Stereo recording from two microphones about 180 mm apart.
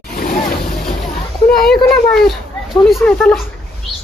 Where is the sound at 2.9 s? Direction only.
5° left (ahead or behind).